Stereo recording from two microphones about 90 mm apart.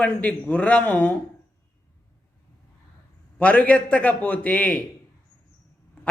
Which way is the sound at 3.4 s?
15° left (ahead or behind).